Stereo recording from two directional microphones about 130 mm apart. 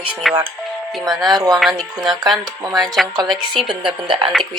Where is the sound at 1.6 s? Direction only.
5° right (ahead or behind).